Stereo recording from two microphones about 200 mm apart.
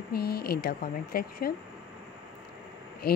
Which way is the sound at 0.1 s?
50° left (ahead or behind).